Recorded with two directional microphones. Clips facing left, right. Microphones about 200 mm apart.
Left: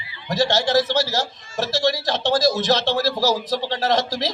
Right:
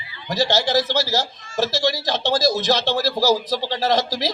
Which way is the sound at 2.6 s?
25° left (ahead or behind).